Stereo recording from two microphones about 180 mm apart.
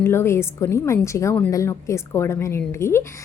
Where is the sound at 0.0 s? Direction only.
15° left (ahead or behind).